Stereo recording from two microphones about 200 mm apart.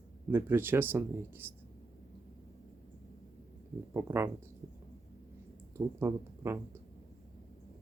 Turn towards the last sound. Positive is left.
turn(degrees=-15)  # may be behind; listen again after turning